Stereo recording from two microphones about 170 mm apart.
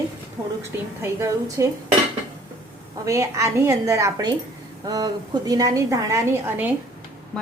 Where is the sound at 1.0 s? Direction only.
20° right (ahead or behind).